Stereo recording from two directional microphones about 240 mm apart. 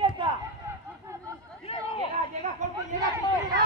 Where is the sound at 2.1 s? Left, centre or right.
Right.